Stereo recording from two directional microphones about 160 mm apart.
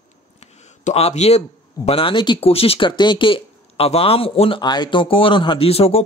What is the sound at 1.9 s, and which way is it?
Speech, 35° left (ahead or behind).